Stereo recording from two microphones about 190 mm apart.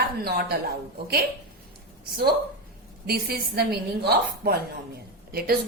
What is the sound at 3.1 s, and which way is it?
A woman's voice, 55° right (ahead or behind).